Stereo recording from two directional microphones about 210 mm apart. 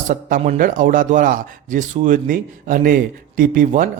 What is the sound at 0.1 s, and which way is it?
A man's voice, 35° right (ahead or behind).